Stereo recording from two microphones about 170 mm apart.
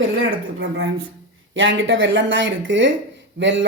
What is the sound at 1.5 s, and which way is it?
Speech, 90° right.